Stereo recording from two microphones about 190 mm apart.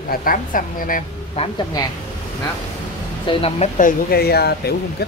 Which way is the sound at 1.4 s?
30° left (ahead or behind).